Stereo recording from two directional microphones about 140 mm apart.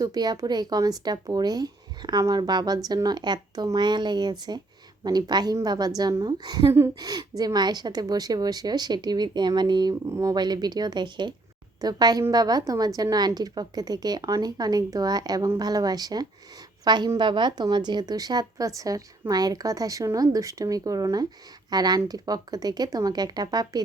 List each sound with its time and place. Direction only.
0.0 s a woman's voice: 30° right (ahead or behind)